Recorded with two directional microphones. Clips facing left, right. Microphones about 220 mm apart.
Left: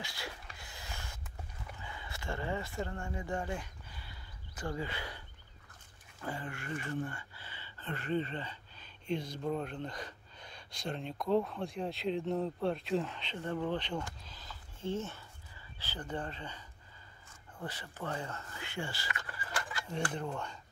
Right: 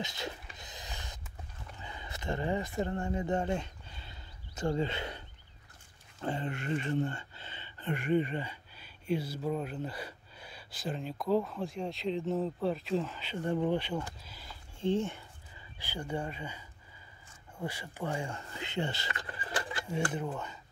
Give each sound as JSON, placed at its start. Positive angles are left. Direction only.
{"t": 0.0, "sound": "a sound", "side_deg": -20}
{"t": 6.2, "sound": "speech", "side_deg": -20}
{"t": 20.2, "sound": "speech", "side_deg": -5}